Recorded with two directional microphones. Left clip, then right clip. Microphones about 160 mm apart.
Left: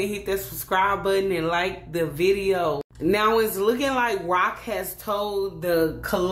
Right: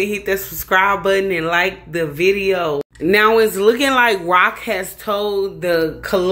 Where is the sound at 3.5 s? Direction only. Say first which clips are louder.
Right 9 dB; 25° right (ahead or behind).